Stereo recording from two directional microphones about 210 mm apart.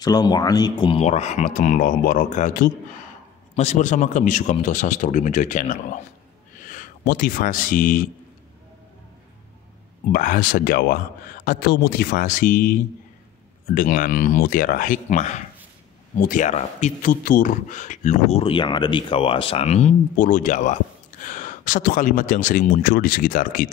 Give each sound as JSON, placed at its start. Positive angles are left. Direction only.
{"t": 0.0, "sound": "a man's voice", "side_deg": 20}
{"t": 10.1, "sound": "a man's voice", "side_deg": 40}
{"t": 13.7, "sound": "a man's voice", "side_deg": 40}